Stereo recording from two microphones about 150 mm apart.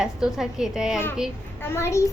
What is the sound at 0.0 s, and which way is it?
Speech, 5° right (ahead or behind).